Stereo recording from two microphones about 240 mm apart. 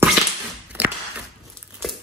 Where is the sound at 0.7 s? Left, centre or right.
Centre.